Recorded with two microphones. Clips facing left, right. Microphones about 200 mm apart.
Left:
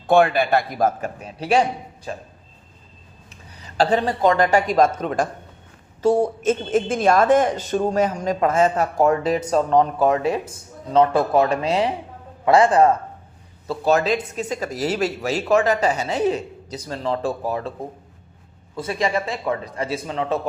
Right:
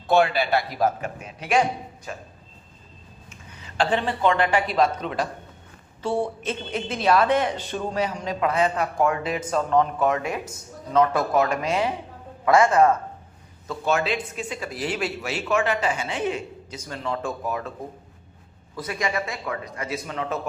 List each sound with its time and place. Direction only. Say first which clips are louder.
0.1 s a woman's voice: left 4 dB; 50° left (ahead or behind); by 2.2 s 30° left (ahead or behind)
3.2 s a woman's voice: left 2 dB; 35° left (ahead or behind)
18.8 s a man's voice: left 4 dB; 30° left (ahead or behind)